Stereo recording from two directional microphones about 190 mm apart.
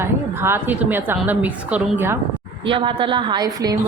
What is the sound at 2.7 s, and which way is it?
A woman's voice, 25° right (ahead or behind).